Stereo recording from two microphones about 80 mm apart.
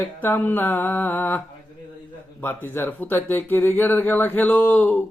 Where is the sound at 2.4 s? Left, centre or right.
Left.